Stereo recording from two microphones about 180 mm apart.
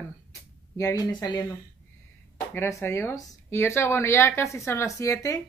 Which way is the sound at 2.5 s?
15° left (ahead or behind).